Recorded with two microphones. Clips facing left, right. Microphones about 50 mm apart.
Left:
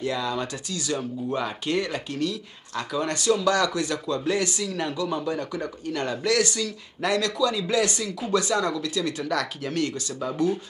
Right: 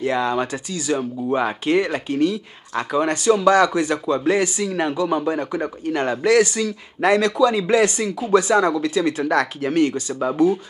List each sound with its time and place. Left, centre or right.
0.0 s speech: right
0.8 s speech: centre